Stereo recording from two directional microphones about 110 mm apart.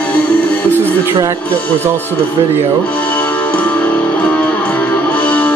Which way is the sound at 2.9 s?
15° left (ahead or behind).